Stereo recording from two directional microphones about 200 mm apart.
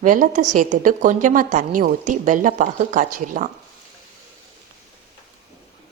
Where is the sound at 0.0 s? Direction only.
40° right (ahead or behind).